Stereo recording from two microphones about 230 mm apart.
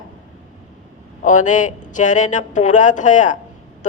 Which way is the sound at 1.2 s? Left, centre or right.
Left.